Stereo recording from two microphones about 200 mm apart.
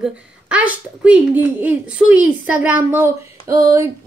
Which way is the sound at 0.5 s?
5° right (ahead or behind).